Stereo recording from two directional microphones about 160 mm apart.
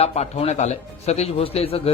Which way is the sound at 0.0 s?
40° left (ahead or behind).